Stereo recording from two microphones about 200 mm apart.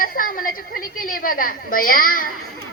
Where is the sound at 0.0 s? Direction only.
45° left (ahead or behind).